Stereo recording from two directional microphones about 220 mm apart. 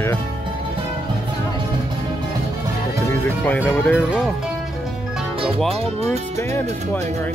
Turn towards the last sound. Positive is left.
turn(degrees=10)  # may be behind; listen again after turning